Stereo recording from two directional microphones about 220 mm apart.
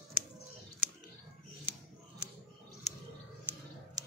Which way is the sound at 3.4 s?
15° right (ahead or behind).